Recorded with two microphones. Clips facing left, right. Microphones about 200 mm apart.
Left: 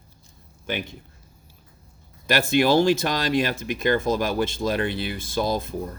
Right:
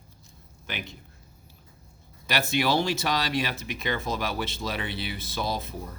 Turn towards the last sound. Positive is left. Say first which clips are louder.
# left 6 dB
turn(degrees=50)  # may be behind; listen again after turning